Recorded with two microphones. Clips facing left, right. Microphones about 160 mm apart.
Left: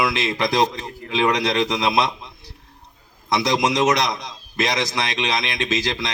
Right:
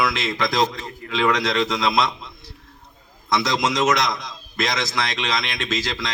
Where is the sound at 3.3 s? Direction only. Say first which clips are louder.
Left 2 dB; 15° left (ahead or behind).